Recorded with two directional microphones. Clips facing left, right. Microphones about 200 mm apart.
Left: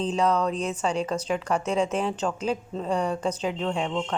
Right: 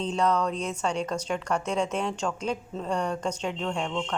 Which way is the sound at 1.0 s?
5° left (ahead or behind).